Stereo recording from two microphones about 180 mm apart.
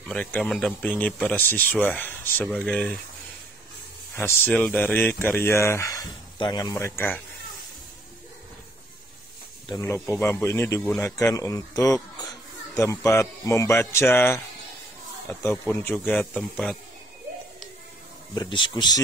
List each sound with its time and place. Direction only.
0.0 s speech: 5° left (ahead or behind)
4.1 s speech: 10° left (ahead or behind)
9.7 s speech: 15° left (ahead or behind)
18.3 s speech: 25° left (ahead or behind)